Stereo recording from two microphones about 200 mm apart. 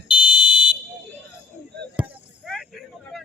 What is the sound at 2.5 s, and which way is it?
Vehicle, centre (ahead or behind).